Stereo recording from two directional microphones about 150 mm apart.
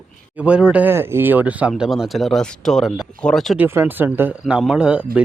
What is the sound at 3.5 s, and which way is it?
Speech, 15° right (ahead or behind).